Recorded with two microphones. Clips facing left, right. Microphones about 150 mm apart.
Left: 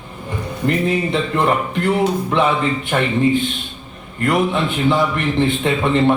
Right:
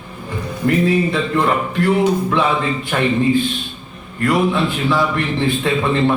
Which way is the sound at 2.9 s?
25° left (ahead or behind).